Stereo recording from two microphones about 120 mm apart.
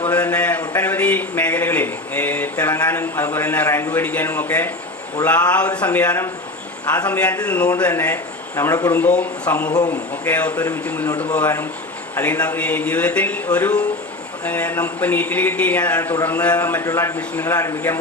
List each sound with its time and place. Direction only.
0.0 s a sound: 15° left (ahead or behind)
0.8 s speech: 15° left (ahead or behind)
8.9 s a man's voice: 15° left (ahead or behind)